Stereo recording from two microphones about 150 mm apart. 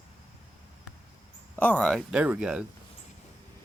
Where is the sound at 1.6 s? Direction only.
10° left (ahead or behind); by 2.7 s 5° right (ahead or behind).